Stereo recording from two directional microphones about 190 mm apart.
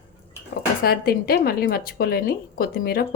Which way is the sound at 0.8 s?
55° left (ahead or behind).